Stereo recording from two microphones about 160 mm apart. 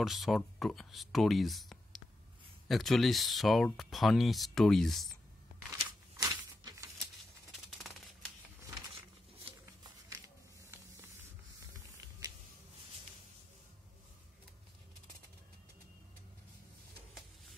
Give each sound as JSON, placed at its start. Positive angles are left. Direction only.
{"t": 0.0, "sound": "speech", "side_deg": 0}
{"t": 6.1, "sound": "a sound", "side_deg": -25}
{"t": 7.8, "sound": "typewriter", "side_deg": 0}